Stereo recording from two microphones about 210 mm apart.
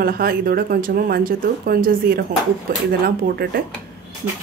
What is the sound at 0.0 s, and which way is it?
Speech, 45° right (ahead or behind).